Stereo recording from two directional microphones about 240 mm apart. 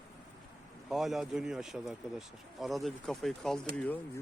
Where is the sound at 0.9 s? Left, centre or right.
Centre.